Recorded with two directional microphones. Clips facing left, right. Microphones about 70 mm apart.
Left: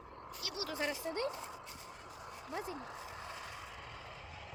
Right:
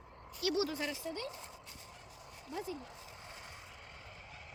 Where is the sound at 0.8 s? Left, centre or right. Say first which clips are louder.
Left 3 dB; left.